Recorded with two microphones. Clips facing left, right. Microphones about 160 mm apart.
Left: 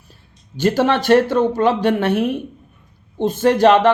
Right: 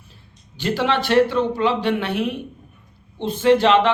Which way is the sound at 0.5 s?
45° left (ahead or behind).